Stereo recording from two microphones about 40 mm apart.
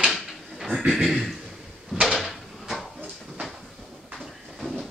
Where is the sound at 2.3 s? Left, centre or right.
Centre.